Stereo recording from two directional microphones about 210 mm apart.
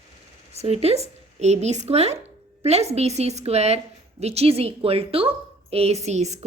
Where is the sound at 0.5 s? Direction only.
30° right (ahead or behind).